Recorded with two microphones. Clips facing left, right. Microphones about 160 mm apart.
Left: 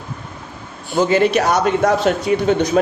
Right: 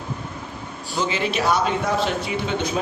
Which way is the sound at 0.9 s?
45° left (ahead or behind).